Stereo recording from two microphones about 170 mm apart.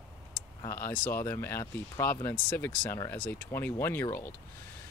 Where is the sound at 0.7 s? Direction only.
15° left (ahead or behind).